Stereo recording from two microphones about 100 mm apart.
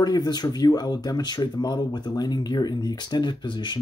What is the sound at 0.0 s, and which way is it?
Speech, 40° left (ahead or behind).